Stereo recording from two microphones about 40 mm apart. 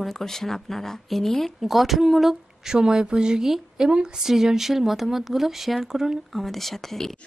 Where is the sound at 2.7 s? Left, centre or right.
Centre.